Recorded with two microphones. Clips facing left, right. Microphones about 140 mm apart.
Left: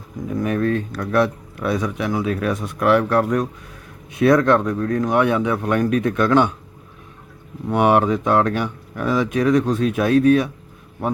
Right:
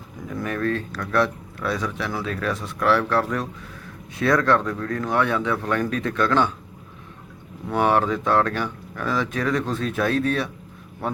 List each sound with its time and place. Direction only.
0.3 s speech: 20° left (ahead or behind)
7.7 s speech: 15° left (ahead or behind)